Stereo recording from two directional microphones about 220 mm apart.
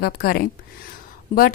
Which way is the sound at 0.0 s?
45° left (ahead or behind).